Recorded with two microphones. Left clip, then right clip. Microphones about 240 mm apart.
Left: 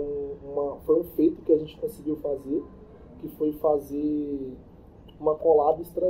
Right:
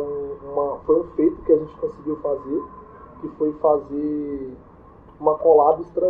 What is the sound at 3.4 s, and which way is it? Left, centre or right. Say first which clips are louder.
Speech: right 5 dB; left.